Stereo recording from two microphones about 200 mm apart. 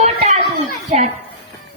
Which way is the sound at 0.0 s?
35° right (ahead or behind).